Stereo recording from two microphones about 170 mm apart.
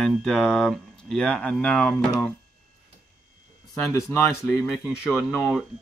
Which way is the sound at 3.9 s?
15° left (ahead or behind).